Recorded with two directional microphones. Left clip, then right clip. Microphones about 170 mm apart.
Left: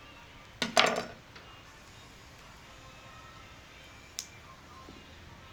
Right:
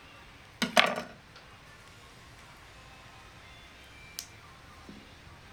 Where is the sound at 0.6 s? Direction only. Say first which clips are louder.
Right 1 dB; 10° right (ahead or behind).